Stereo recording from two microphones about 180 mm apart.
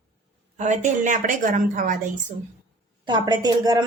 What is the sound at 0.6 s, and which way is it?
A woman's voice, 40° right (ahead or behind).